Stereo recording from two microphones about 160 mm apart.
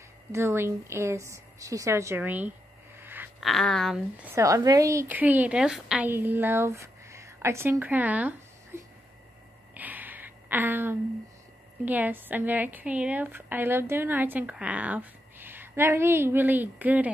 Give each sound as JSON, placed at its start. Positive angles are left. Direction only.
{"t": 0.3, "sound": "a woman's voice", "side_deg": -15}
{"t": 3.0, "sound": "a sound", "side_deg": -15}
{"t": 3.3, "sound": "speech", "side_deg": 0}
{"t": 4.2, "sound": "a woman's voice", "side_deg": -20}
{"t": 9.8, "sound": "a sound", "side_deg": -10}
{"t": 11.8, "sound": "a woman's voice", "side_deg": -10}